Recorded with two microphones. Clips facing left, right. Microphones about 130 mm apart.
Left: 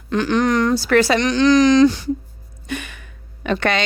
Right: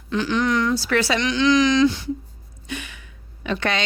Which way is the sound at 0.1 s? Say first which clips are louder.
Left 4 dB; 50° left (ahead or behind).